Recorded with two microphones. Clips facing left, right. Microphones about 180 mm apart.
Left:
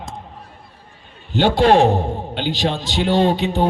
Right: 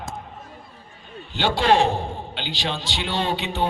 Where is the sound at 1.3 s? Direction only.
50° left (ahead or behind).